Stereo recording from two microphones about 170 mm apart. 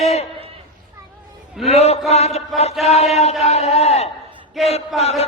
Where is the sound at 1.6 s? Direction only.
40° left (ahead or behind).